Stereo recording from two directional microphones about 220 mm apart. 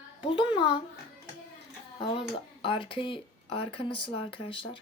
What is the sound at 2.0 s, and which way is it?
Speech, 20° left (ahead or behind).